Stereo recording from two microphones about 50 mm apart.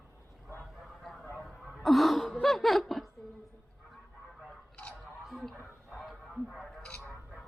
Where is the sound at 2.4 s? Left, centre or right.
Centre.